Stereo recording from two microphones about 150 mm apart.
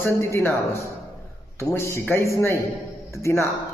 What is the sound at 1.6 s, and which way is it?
A man's voice, 15° left (ahead or behind).